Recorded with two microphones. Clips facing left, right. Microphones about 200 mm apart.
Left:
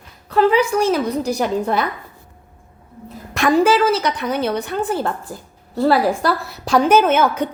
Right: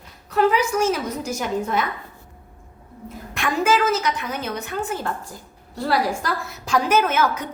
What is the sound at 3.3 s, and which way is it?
A woman's voice, 35° left (ahead or behind).